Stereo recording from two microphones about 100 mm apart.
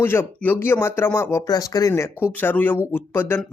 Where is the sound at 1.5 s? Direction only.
40° left (ahead or behind).